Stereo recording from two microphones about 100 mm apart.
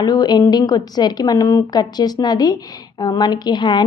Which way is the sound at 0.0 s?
40° left (ahead or behind).